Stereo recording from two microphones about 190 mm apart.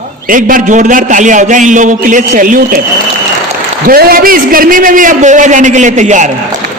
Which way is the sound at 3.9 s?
50° right (ahead or behind).